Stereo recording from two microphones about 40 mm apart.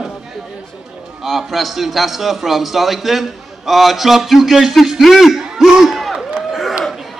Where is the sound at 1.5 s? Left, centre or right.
Centre.